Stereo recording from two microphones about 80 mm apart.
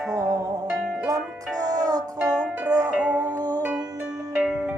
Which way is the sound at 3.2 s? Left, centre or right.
Right.